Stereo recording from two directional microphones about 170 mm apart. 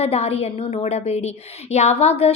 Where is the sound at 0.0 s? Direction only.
35° left (ahead or behind).